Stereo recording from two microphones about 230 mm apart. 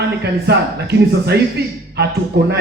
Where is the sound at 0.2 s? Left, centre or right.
Right.